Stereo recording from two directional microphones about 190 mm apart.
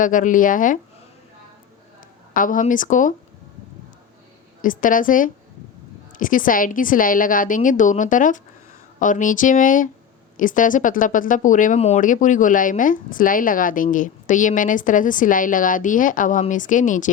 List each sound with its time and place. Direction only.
0.0 s speech: 45° left (ahead or behind)
2.3 s speech: 45° left (ahead or behind)
4.6 s speech: 45° left (ahead or behind)